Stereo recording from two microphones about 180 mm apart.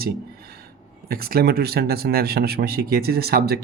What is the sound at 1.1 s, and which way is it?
Speech, 55° right (ahead or behind).